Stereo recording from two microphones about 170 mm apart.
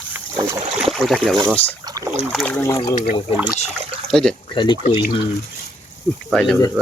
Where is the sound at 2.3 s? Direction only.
10° left (ahead or behind).